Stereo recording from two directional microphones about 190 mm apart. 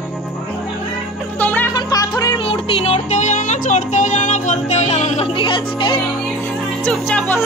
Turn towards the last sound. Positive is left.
turn(degrees=10)  # may be behind; listen again after turning